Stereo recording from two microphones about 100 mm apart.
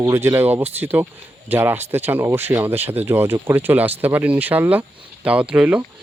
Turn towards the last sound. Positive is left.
turn(degrees=-15)  # may be behind; listen again after turning